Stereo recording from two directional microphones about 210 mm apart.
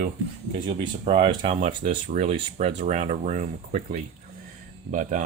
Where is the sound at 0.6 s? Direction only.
25° right (ahead or behind).